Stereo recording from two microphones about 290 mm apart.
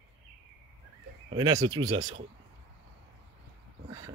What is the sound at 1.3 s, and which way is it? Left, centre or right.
Speech, centre.